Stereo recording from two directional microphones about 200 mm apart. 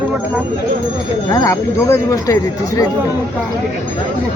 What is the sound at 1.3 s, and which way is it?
Speech, 15° left (ahead or behind).